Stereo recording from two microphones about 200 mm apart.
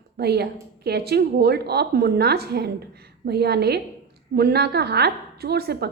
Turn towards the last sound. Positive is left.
turn(degrees=-55)  # may be behind; listen again after turning